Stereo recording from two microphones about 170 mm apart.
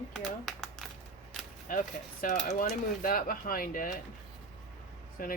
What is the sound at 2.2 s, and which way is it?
Speech, 45° left (ahead or behind).